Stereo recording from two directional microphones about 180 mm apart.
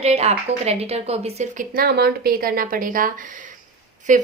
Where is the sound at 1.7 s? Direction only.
60° right (ahead or behind).